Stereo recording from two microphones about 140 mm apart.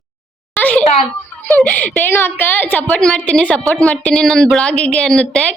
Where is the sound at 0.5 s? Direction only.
10° left (ahead or behind).